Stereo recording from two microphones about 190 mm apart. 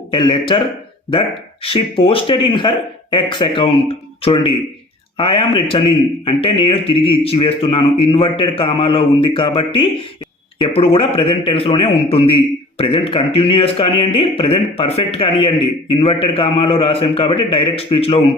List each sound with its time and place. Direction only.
0.1 s a man's voice: 25° left (ahead or behind)
1.6 s a man's voice: 30° left (ahead or behind)